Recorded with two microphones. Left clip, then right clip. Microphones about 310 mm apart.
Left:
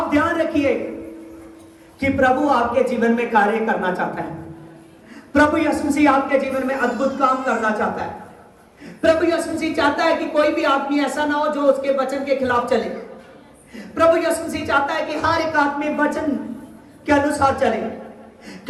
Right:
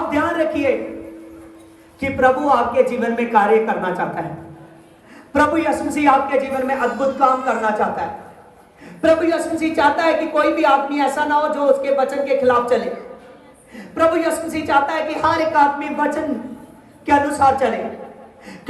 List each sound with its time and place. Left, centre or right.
0.1 s a sound: centre
2.0 s speech: centre
5.3 s speech: centre